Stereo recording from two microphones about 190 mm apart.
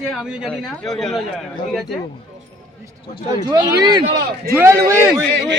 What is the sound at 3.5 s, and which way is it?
Speech, 20° right (ahead or behind).